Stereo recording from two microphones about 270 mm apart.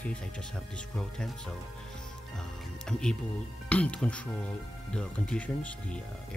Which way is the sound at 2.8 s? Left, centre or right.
Centre.